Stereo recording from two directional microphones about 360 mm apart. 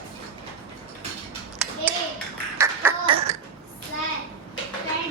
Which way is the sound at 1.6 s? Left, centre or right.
Centre.